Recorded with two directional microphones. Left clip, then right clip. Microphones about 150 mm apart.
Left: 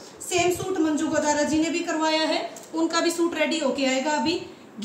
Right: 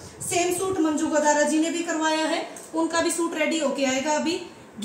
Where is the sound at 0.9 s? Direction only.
Centre (ahead or behind).